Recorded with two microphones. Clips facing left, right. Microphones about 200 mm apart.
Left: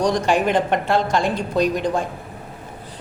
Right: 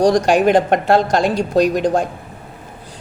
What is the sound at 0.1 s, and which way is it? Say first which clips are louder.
Speech: right 5 dB; 80° right.